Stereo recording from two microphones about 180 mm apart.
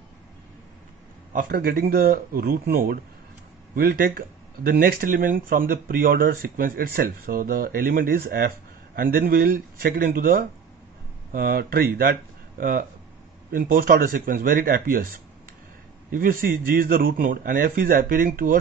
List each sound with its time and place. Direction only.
1.3 s speech: 55° right (ahead or behind)
16.1 s speech: 50° right (ahead or behind)